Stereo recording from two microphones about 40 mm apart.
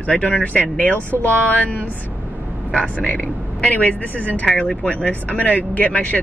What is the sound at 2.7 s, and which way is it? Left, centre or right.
Speech, left.